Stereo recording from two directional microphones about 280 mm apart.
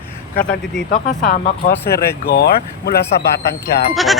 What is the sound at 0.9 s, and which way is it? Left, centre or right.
Speech, left.